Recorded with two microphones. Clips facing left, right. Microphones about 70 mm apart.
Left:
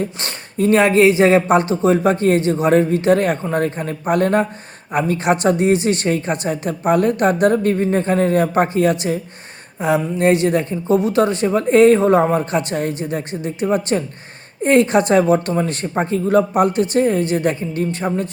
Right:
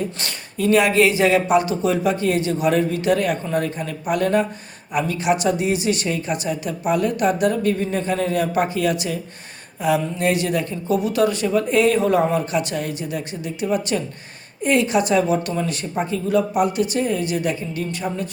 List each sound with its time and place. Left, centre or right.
0.2 s speech: left